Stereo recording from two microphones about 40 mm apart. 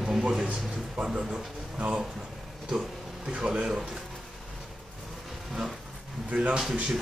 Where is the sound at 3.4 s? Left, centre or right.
Right.